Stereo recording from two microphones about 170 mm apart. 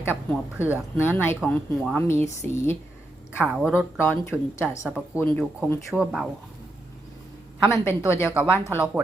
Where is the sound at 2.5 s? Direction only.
15° left (ahead or behind).